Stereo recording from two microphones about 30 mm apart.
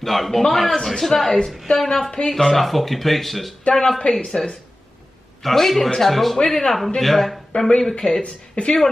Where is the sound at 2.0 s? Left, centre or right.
Left.